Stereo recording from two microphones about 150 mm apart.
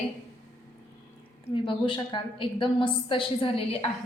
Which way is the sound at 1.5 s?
35° left (ahead or behind).